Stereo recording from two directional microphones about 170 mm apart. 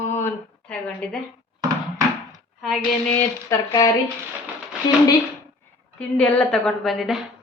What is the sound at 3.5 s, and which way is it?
Speech, 20° left (ahead or behind).